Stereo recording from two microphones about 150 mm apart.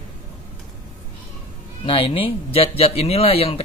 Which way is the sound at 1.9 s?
35° left (ahead or behind).